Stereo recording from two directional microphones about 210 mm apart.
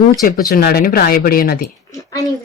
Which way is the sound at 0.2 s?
40° left (ahead or behind).